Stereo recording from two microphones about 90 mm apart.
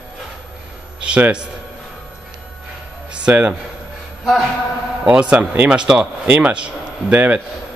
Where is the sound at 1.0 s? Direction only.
10° right (ahead or behind).